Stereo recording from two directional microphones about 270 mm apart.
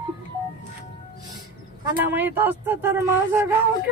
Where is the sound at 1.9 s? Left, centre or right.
Centre.